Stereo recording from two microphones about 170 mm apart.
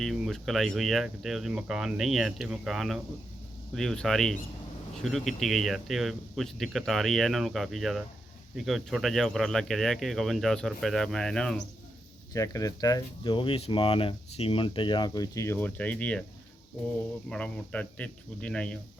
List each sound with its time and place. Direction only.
0.0 s speech: centre (ahead or behind)
12.3 s speech: 20° left (ahead or behind)
17.2 s speech: 5° left (ahead or behind)